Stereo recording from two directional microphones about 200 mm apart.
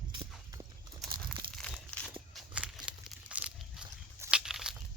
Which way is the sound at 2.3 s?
5° right (ahead or behind).